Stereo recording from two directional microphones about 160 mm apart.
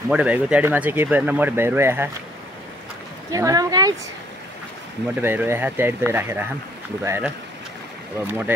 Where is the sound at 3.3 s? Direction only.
20° right (ahead or behind).